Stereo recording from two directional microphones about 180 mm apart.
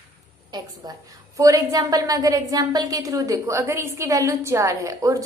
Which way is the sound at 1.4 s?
20° right (ahead or behind).